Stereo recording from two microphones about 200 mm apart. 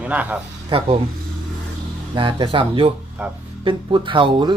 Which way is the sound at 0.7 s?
25° right (ahead or behind).